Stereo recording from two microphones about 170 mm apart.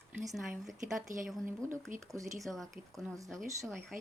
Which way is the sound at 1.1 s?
50° right (ahead or behind).